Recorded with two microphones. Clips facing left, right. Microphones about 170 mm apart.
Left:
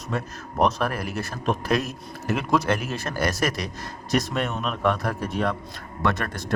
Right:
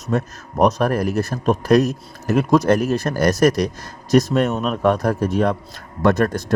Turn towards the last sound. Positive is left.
turn(degrees=-40)  # may be behind; listen again after turning